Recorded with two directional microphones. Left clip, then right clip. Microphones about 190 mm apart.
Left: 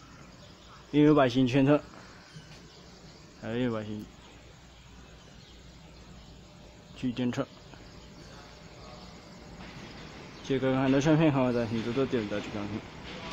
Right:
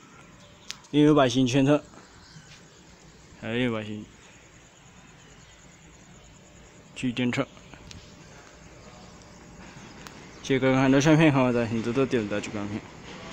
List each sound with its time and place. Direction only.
0.9 s speech: 15° right (ahead or behind)
3.4 s speech: 15° right (ahead or behind)
7.0 s speech: 15° right (ahead or behind)
10.4 s speech: 20° right (ahead or behind)